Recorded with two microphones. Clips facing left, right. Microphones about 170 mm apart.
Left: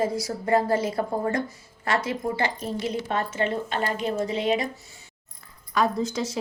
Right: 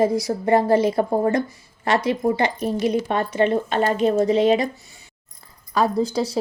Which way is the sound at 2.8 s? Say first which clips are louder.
Right 6 dB; 15° right (ahead or behind).